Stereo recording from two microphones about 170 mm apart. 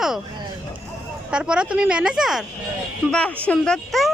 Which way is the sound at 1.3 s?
5° right (ahead or behind).